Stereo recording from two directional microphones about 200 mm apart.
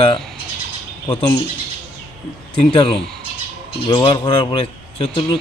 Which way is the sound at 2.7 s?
25° left (ahead or behind).